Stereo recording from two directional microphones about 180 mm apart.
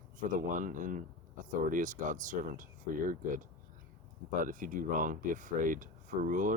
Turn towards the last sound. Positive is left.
turn(degrees=-45)  # may be behind; listen again after turning